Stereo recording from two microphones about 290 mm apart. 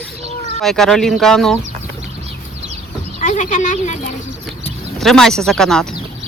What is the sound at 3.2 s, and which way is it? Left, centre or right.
Speech, left.